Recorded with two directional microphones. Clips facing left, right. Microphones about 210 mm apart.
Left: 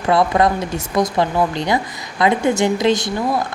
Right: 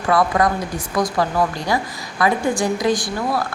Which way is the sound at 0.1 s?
25° left (ahead or behind).